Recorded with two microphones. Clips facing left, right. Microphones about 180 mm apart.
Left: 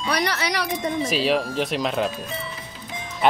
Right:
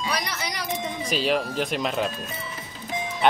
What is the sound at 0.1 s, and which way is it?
Wind chime, 70° left (ahead or behind).